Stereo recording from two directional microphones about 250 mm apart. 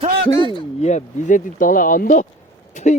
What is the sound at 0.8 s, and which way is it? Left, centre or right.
Speech, left.